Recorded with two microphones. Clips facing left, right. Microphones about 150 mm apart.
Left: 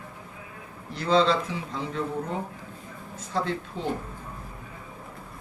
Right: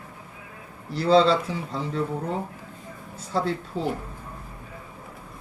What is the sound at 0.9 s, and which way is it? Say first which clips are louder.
Speech: right 4 dB; 35° right (ahead or behind).